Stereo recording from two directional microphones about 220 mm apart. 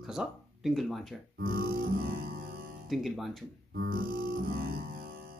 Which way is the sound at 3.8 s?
40° right (ahead or behind).